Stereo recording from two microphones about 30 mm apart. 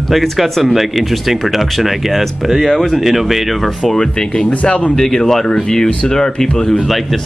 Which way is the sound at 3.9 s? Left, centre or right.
Centre.